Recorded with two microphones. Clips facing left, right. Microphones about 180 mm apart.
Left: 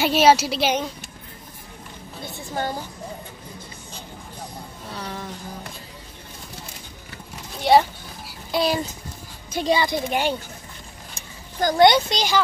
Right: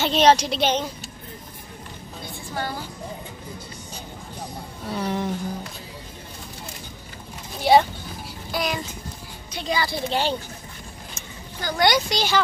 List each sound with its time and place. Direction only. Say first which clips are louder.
0.0 s a woman's voice: left 1 dB; 10° left (ahead or behind)
2.2 s a sound: left 3 dB; 20° left (ahead or behind)
5.0 s music: right 8 dB; 20° right (ahead or behind)
7.7 s speech: even; centre (ahead or behind)
8.5 s child singing: left 5 dB; 30° left (ahead or behind)
9.7 s a woman's voice: left 3 dB; 20° left (ahead or behind)
11.1 s speech: left 11 dB; 30° left (ahead or behind)